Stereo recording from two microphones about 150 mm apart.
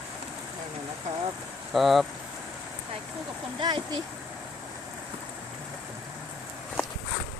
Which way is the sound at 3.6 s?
30° right (ahead or behind).